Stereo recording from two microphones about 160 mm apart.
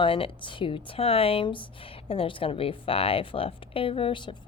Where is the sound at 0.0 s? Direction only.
35° left (ahead or behind).